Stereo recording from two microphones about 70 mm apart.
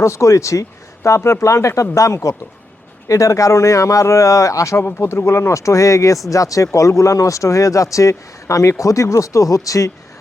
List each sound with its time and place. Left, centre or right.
0.0 s speech: left
4.9 s speech: left